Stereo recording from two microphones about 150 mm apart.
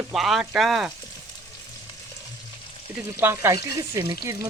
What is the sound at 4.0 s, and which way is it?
Speech, 25° right (ahead or behind).